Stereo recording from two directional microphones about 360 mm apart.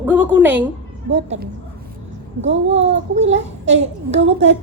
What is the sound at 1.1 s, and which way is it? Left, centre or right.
A woman's voice, right.